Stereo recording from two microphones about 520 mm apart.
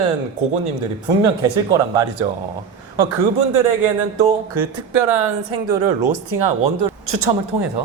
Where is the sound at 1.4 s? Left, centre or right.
Right.